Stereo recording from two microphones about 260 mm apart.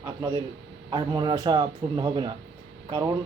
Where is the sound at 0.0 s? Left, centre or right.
Centre.